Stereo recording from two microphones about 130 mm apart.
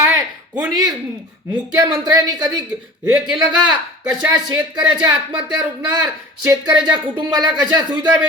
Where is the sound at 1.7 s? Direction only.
25° right (ahead or behind).